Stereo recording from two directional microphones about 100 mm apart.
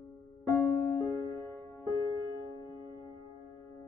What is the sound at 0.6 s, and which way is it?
Music, 25° left (ahead or behind).